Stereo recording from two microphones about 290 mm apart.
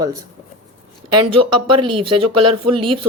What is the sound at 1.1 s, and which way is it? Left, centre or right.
A woman's voice, centre.